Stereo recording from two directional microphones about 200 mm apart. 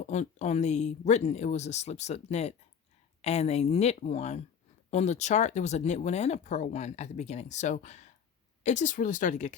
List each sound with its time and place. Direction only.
0.0 s speech: 35° left (ahead or behind)